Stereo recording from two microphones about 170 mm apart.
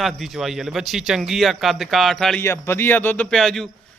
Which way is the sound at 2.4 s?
15° left (ahead or behind).